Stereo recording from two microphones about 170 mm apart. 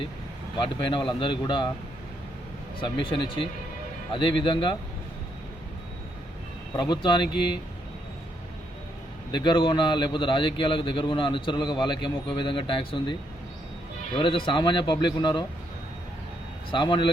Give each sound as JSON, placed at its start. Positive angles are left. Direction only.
{"t": 0.8, "sound": "a man's voice", "side_deg": 30}
{"t": 2.8, "sound": "a man's voice", "side_deg": 30}
{"t": 6.7, "sound": "a man's voice", "side_deg": 25}
{"t": 9.3, "sound": "a man's voice", "side_deg": 25}
{"t": 14.2, "sound": "a man's voice", "side_deg": 30}
{"t": 16.7, "sound": "a man's voice", "side_deg": 30}